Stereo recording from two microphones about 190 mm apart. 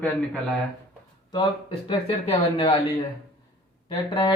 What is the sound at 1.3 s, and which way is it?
Speech, 25° left (ahead or behind).